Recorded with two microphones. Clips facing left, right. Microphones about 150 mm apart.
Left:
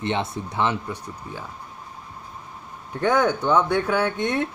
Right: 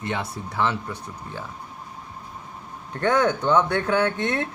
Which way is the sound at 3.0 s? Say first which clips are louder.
Even; 10° left (ahead or behind).